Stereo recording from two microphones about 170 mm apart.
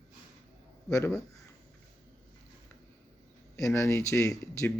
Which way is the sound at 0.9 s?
15° left (ahead or behind).